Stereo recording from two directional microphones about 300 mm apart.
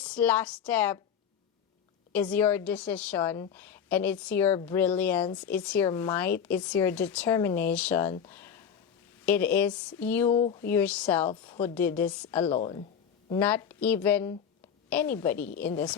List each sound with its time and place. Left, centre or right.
0.0 s a woman's voice: centre
2.1 s a woman's voice: centre
10.3 s speech: centre
10.6 s a woman's voice: centre
12.5 s a woman's voice: centre